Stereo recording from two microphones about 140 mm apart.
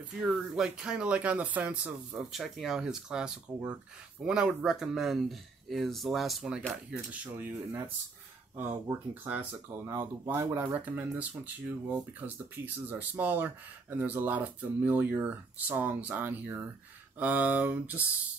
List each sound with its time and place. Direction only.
0.2 s speech: 5° right (ahead or behind)